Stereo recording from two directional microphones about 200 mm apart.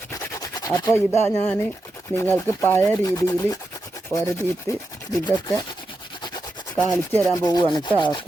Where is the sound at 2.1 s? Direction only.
10° left (ahead or behind).